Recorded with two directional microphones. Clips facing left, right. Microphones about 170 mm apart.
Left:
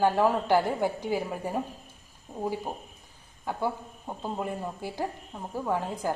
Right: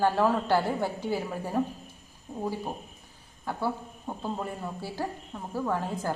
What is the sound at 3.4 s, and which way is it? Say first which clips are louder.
Speech: even; 15° left (ahead or behind).